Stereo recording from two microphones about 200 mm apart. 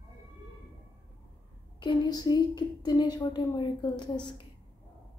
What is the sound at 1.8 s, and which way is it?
A woman's voice, 20° left (ahead or behind).